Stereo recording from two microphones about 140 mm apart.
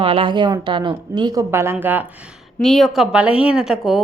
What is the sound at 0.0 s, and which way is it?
A woman's voice, 40° right (ahead or behind).